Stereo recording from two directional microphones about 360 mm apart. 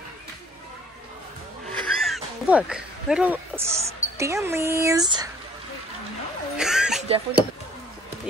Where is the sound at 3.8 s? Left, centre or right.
Centre.